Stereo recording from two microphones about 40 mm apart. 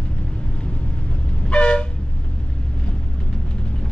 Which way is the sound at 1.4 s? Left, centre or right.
Left.